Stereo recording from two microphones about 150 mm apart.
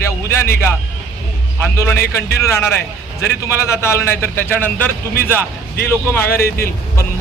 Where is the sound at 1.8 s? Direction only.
20° left (ahead or behind).